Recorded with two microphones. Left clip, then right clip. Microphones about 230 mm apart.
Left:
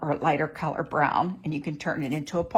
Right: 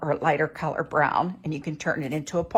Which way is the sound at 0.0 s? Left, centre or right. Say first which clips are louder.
Right 2 dB; right.